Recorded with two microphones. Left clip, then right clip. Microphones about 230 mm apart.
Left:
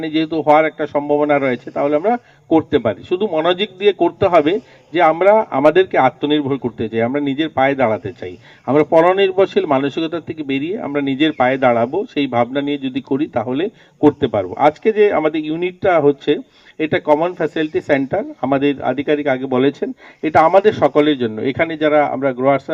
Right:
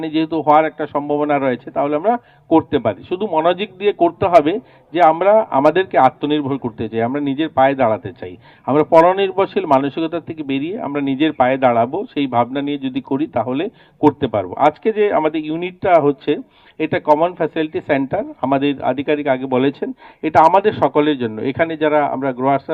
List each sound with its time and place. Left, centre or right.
0.0 s a man's voice: left